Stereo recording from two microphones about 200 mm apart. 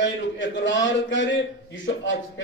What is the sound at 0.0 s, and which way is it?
A man's voice, 70° left (ahead or behind).